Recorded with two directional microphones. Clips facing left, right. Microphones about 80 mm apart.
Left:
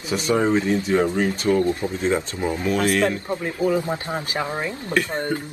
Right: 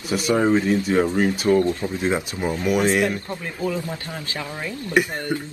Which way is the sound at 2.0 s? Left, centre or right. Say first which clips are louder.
Left 1 dB; centre.